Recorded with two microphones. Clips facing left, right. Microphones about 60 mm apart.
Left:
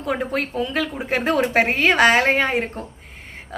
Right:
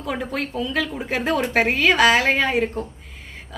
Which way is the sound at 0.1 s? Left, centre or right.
Left.